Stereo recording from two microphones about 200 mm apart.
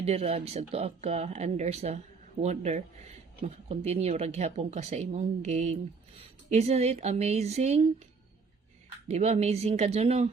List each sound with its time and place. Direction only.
0.0 s speech: 30° right (ahead or behind)
9.0 s speech: 35° right (ahead or behind)